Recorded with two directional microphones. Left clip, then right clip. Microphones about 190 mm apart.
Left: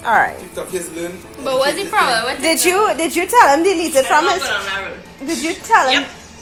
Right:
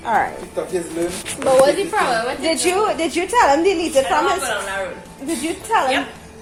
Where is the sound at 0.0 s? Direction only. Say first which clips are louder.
Left 4 dB; 5° left (ahead or behind).